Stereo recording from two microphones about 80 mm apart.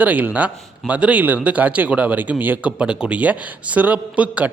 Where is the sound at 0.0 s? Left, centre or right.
Centre.